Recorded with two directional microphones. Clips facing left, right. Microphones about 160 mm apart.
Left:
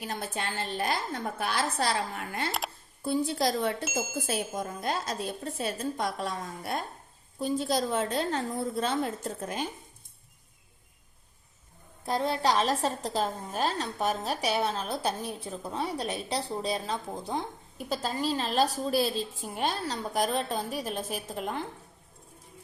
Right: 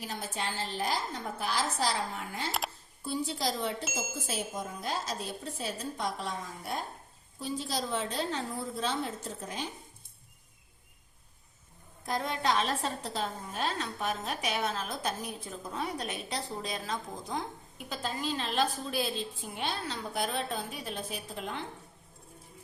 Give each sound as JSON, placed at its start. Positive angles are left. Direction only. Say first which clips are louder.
{"t": 0.3, "sound": "a woman's voice", "louder": "left 1 dB", "side_deg": 55}
{"t": 7.3, "sound": "a woman's voice", "louder": "left 7 dB", "side_deg": 50}
{"t": 12.0, "sound": "a woman's voice", "louder": "left 4 dB", "side_deg": 30}